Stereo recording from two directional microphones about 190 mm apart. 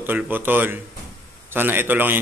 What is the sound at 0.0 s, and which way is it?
Speech, 10° right (ahead or behind).